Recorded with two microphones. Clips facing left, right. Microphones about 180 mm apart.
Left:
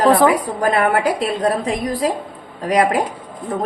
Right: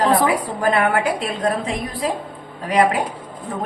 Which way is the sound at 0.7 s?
35° left (ahead or behind).